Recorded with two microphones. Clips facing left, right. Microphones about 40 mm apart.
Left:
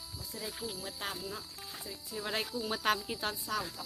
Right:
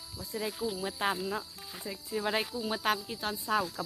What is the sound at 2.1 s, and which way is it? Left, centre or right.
Speech, centre.